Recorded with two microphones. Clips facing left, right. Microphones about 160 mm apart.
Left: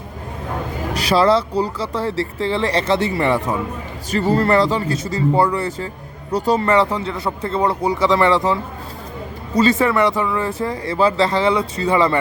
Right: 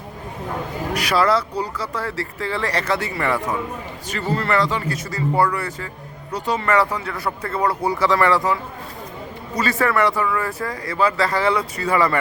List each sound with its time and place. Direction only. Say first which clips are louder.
0.9 s speech: left 4 dB; 30° left (ahead or behind)
6.7 s speech: left 3 dB; 25° left (ahead or behind)
9.6 s speech: left 4 dB; 20° left (ahead or behind)